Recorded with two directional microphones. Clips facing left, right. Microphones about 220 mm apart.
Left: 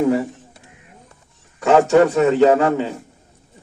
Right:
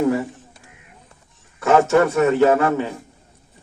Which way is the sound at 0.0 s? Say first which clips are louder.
Left 2 dB; 20° left (ahead or behind).